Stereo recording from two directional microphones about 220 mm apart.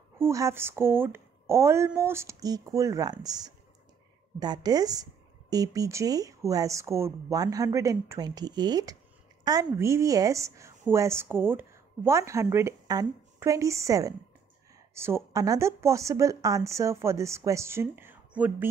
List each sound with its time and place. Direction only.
0.2 s a woman's voice: 15° right (ahead or behind)